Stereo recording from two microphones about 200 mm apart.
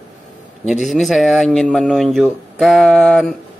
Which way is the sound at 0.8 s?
Centre (ahead or behind).